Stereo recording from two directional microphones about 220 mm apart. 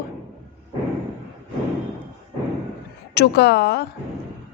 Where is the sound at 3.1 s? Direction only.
50° left (ahead or behind).